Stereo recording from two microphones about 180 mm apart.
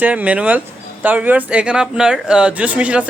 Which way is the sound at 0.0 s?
10° right (ahead or behind).